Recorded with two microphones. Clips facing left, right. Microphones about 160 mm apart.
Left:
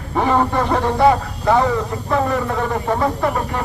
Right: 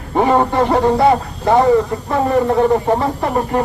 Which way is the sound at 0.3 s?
30° right (ahead or behind).